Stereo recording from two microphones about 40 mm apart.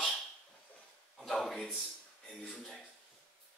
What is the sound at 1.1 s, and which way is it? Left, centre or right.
Speech, centre.